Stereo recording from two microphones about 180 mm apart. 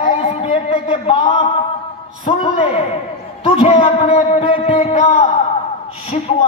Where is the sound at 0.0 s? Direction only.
35° left (ahead or behind).